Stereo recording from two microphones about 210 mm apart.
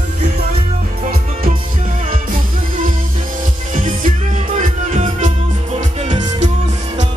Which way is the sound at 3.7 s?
40° right (ahead or behind).